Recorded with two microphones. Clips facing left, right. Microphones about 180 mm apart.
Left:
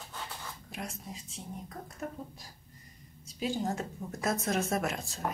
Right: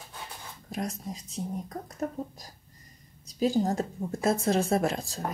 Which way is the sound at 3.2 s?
40° right (ahead or behind).